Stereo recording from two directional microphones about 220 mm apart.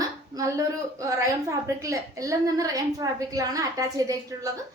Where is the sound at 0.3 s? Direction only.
15° right (ahead or behind).